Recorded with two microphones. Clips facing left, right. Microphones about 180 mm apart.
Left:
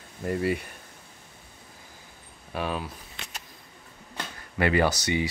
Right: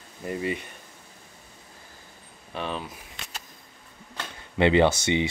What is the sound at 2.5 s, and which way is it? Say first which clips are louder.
Speech: left 2 dB; 5° left (ahead or behind).